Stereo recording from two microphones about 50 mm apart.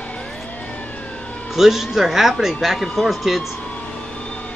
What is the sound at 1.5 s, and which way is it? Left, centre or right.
Speech, centre.